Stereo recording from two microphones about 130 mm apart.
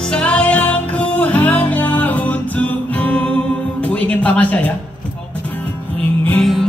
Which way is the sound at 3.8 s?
10° left (ahead or behind).